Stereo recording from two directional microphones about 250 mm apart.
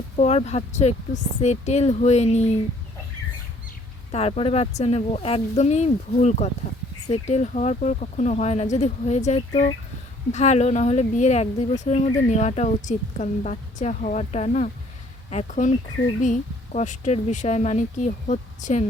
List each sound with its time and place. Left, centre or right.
0.2 s speech: left
4.1 s speech: left